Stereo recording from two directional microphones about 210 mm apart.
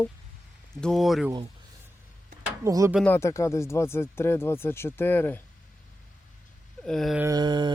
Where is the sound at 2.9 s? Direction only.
10° left (ahead or behind).